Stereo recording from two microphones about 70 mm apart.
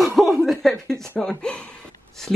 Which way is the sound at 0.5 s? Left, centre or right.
Centre.